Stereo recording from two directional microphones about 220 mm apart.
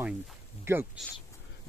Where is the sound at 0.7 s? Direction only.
10° right (ahead or behind).